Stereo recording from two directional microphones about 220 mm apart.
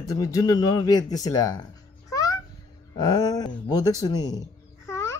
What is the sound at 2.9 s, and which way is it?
Speech, 20° left (ahead or behind).